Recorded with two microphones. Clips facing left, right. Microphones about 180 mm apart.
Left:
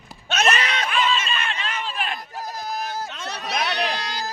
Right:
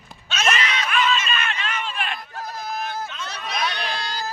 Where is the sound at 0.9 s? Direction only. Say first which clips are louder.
Right 2 dB; 30° left (ahead or behind).